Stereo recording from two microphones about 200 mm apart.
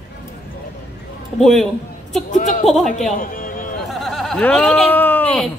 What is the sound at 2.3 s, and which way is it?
Speech, 40° left (ahead or behind).